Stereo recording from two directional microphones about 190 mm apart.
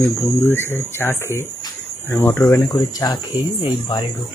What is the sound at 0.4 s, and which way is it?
Speech, 10° left (ahead or behind).